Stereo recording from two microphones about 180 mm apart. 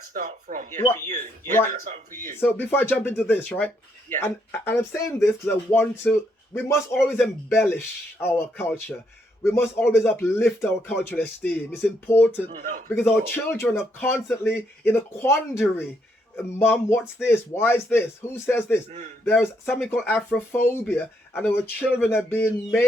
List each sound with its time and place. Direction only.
0.1 s speech: 45° right (ahead or behind)
0.8 s speech: 10° left (ahead or behind)
1.0 s speech: 45° right (ahead or behind)
2.6 s speech: 10° left (ahead or behind)
12.5 s speech: 50° right (ahead or behind)
12.9 s speech: 10° left (ahead or behind)
18.9 s a man's voice: 40° right (ahead or behind)
19.2 s speech: 10° left (ahead or behind)